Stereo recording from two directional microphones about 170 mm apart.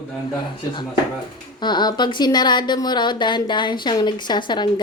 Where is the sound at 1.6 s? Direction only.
25° left (ahead or behind).